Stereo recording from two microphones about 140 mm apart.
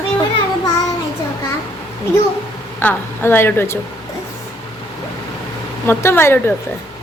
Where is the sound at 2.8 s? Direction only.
15° left (ahead or behind).